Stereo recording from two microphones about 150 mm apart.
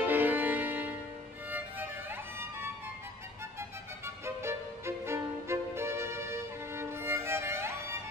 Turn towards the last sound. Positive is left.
turn(degrees=-15)  # may be behind; listen again after turning